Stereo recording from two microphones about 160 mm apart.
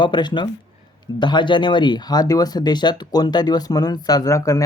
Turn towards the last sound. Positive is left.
turn(degrees=20)  # may be behind; listen again after turning